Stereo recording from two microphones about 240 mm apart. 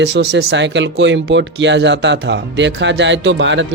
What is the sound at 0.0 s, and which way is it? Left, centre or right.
Speech, right.